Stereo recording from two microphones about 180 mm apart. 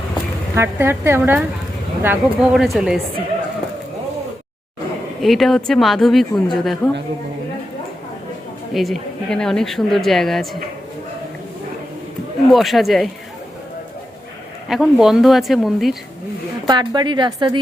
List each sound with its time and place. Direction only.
0.5 s a woman's voice: 15° right (ahead or behind)
5.2 s a woman's voice: centre (ahead or behind)
8.7 s a woman's voice: centre (ahead or behind)
12.5 s a woman's voice: centre (ahead or behind)
14.7 s a woman's voice: centre (ahead or behind)
16.6 s speech: 25° right (ahead or behind)